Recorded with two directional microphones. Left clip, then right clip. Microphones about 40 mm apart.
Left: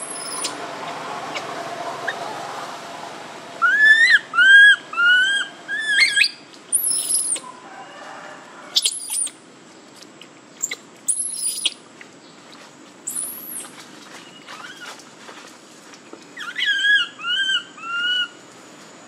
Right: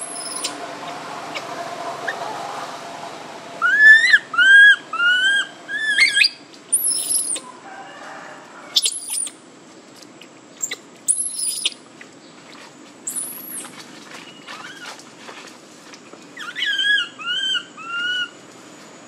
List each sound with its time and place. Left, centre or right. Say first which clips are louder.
0.1 s rodents: even; centre
0.6 s mouse: left 1 dB; left
0.9 s a sound: left 1 dB; left; by 6.3 s centre
6.9 s rodents: left 1 dB; centre
8.7 s rodents: right 1 dB; centre
11.3 s owl: left 1 dB; centre
13.6 s vehicle: right 3 dB; right
14.6 s train: right 1 dB; centre
16.3 s a sound: left 1 dB; centre